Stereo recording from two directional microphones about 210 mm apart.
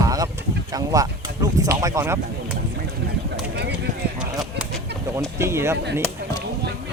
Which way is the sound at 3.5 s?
55° right (ahead or behind).